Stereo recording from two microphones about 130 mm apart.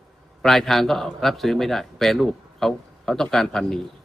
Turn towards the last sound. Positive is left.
turn(degrees=0)  # may be behind; listen again after turning